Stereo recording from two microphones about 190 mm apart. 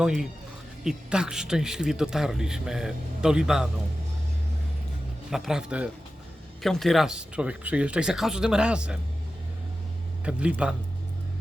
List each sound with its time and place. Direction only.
0.0 s speech: centre (ahead or behind)
5.3 s speech: 5° right (ahead or behind)
10.2 s speech: 5° right (ahead or behind)